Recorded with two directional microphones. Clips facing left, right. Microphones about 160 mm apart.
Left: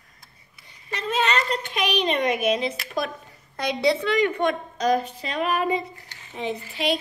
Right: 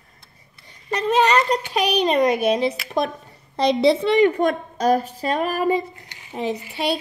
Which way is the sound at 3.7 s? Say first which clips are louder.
Right 4 dB; 30° right (ahead or behind).